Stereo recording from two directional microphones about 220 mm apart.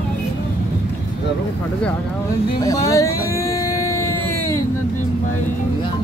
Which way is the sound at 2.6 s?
15° left (ahead or behind).